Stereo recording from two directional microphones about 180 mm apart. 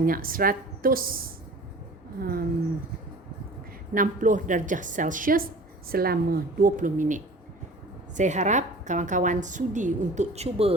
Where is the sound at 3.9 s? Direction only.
45° right (ahead or behind).